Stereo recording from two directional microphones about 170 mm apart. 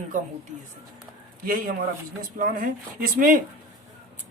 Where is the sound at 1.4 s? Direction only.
55° right (ahead or behind).